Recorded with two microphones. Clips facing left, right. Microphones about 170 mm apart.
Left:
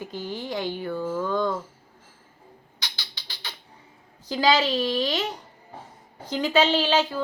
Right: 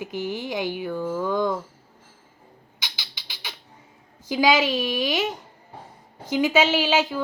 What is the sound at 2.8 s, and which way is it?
Music, 10° right (ahead or behind).